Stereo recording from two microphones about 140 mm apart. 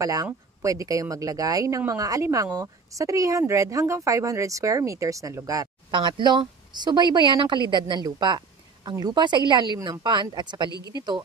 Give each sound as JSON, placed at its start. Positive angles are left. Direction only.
{"t": 0.0, "sound": "speech", "side_deg": -25}